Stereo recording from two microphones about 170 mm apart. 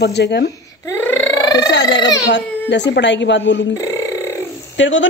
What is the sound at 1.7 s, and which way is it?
A woman's voice, 90° left.